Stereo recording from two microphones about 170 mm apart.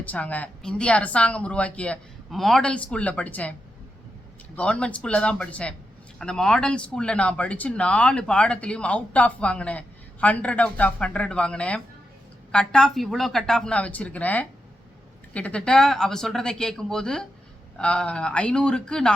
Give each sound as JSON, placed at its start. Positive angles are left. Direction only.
{"t": 0.0, "sound": "speech", "side_deg": 10}
{"t": 4.5, "sound": "speech", "side_deg": 5}